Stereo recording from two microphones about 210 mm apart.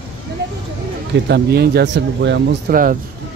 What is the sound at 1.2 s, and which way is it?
Speech, 50° right (ahead or behind).